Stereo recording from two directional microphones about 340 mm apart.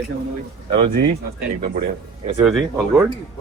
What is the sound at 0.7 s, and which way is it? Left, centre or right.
Speech, centre.